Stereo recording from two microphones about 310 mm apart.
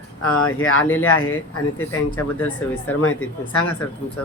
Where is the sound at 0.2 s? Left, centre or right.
Left.